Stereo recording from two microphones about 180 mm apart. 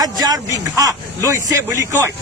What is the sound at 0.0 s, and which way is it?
Speech, 20° right (ahead or behind).